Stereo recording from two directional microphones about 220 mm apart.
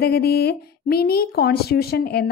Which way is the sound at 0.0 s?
45° left (ahead or behind).